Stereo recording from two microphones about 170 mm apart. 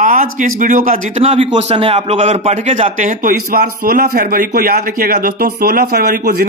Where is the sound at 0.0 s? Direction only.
50° right (ahead or behind).